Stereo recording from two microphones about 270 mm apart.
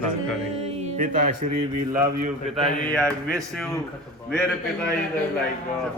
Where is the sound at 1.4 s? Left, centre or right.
Right.